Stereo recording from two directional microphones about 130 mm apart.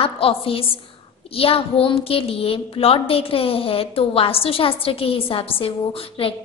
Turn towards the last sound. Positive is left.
turn(degrees=45)  # may be behind; listen again after turning